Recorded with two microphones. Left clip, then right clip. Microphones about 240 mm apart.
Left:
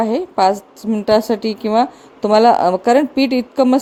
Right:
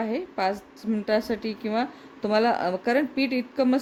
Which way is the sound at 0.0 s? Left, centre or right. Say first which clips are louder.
Left 12 dB; left.